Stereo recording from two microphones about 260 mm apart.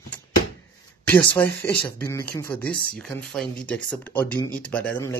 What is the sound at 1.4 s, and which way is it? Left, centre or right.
Speech, centre.